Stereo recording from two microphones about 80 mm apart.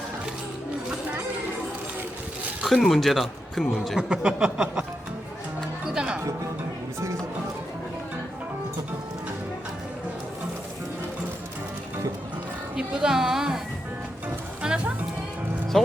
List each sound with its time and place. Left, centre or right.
2.6 s speech: centre
4.1 s a sound: centre
5.9 s music: centre
12.7 s music: centre
14.6 s music: centre